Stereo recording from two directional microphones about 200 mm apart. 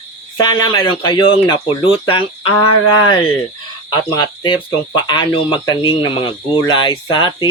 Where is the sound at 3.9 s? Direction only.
20° left (ahead or behind).